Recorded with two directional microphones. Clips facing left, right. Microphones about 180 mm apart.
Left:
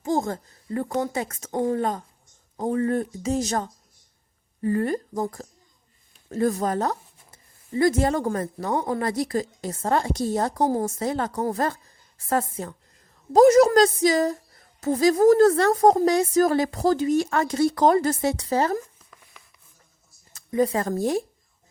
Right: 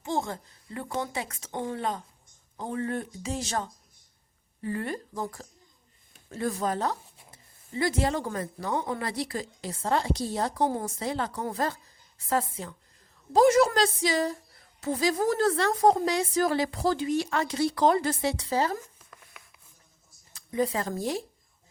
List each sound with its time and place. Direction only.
0.0 s a woman's voice: 40° left (ahead or behind)
20.3 s speech: 45° left (ahead or behind)